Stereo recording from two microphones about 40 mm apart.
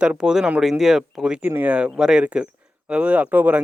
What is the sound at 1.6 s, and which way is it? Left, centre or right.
Speech, right.